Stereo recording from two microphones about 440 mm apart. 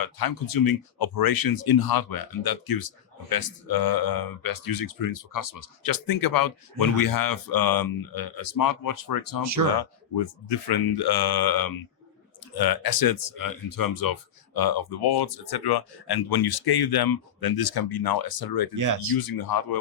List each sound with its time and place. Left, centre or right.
0.0 s speech: left
9.4 s speech: right
9.7 s speech: left
18.8 s speech: right
19.1 s speech: left